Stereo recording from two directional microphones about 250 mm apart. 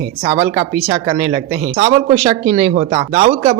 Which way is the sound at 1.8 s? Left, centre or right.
Right.